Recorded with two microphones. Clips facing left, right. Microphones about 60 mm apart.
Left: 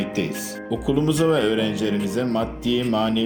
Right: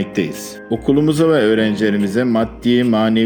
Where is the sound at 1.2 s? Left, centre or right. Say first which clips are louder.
Right 6 dB; right.